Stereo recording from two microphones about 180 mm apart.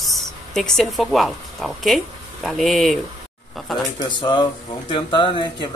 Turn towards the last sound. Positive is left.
turn(degrees=25)  # may be behind; listen again after turning